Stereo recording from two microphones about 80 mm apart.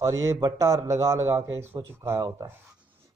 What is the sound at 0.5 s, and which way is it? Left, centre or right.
Speech, right.